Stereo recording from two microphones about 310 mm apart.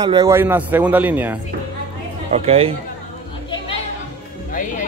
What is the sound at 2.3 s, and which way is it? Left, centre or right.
Speech, centre.